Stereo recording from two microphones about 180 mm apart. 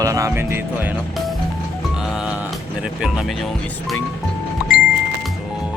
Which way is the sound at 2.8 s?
5° right (ahead or behind).